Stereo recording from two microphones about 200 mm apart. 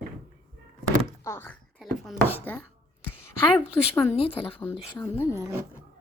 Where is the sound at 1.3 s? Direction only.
10° left (ahead or behind).